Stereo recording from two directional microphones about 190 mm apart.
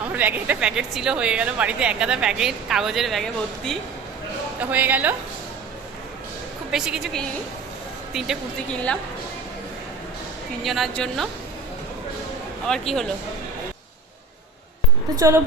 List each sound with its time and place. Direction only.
0.1 s a woman's voice: 10° right (ahead or behind)
4.7 s a woman's voice: 10° right (ahead or behind)
6.7 s a woman's voice: 5° right (ahead or behind)
10.6 s a woman's voice: centre (ahead or behind)
12.6 s a woman's voice: centre (ahead or behind)
15.1 s a woman's voice: 15° right (ahead or behind)